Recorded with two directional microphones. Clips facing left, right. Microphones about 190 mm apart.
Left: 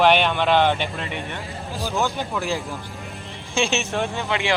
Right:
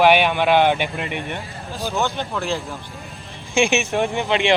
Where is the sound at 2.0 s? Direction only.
5° left (ahead or behind).